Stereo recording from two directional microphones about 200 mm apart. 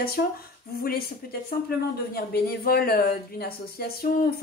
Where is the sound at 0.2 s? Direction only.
55° left (ahead or behind).